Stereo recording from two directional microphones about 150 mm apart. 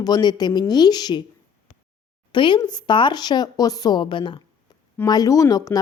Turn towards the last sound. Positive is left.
turn(degrees=25)  # may be behind; listen again after turning